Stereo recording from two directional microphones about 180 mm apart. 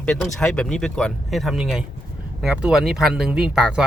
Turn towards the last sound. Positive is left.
turn(degrees=-5)  # may be behind; listen again after turning